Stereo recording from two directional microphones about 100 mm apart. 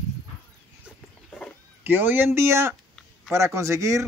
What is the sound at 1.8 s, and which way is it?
Speech, 20° right (ahead or behind).